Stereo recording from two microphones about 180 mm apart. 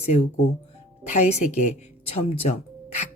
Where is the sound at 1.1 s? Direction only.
40° left (ahead or behind).